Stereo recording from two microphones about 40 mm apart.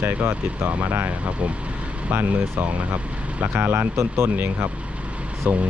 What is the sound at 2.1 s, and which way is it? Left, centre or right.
Speech, right.